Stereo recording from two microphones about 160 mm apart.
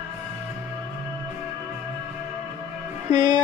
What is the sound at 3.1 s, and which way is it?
Music, 30° right (ahead or behind).